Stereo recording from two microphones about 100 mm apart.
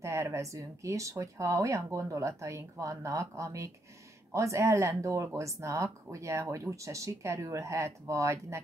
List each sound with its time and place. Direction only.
0.0 s speech: 30° right (ahead or behind)